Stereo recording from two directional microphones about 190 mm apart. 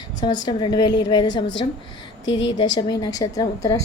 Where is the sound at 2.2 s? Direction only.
75° left (ahead or behind).